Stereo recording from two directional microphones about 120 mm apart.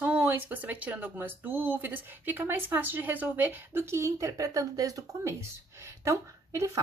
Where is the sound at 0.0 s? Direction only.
15° right (ahead or behind).